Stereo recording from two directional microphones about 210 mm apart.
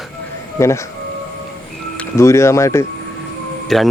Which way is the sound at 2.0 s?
15° left (ahead or behind).